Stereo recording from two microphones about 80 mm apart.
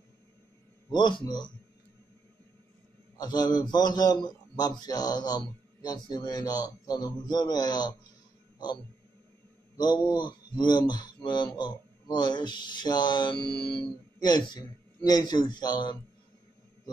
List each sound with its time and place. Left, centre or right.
0.9 s speech: left
3.2 s speech: left
9.8 s speech: left